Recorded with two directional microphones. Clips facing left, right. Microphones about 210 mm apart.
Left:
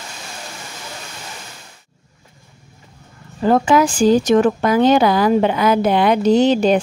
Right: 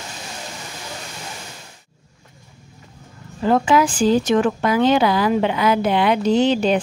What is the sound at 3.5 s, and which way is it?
Speech, 45° left (ahead or behind).